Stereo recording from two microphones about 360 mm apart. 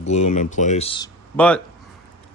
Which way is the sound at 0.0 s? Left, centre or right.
Centre.